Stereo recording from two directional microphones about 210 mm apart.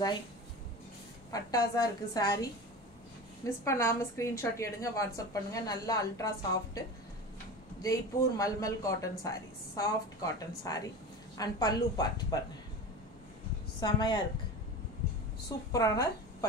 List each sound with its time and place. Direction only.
1.3 s a woman's voice: 15° left (ahead or behind)
7.8 s a woman's voice: 15° left (ahead or behind)
13.7 s a woman's voice: 20° left (ahead or behind)
15.7 s a woman's voice: 15° left (ahead or behind)